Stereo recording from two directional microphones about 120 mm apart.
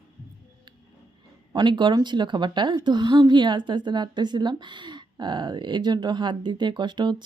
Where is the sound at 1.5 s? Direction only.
40° right (ahead or behind).